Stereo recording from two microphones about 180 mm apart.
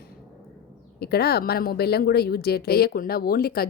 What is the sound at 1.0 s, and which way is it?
Speech, 60° left (ahead or behind).